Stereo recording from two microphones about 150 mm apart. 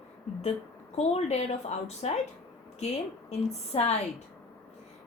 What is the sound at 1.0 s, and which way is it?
Speech, 45° left (ahead or behind).